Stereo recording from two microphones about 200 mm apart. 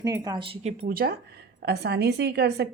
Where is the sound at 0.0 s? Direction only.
20° right (ahead or behind).